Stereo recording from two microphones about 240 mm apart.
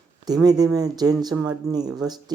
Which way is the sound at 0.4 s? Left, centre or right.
Centre.